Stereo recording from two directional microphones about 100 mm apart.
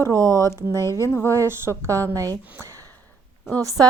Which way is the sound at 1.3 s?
25° right (ahead or behind).